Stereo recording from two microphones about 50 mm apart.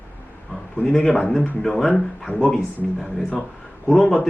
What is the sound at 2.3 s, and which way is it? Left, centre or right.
Speech, right.